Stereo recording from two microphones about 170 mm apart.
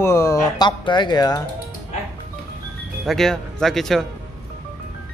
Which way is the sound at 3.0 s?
Centre (ahead or behind).